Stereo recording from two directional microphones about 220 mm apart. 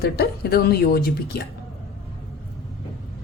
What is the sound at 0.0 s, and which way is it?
Speech, 45° left (ahead or behind).